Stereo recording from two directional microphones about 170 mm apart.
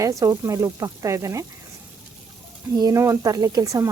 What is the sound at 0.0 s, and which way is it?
Speech, 20° right (ahead or behind).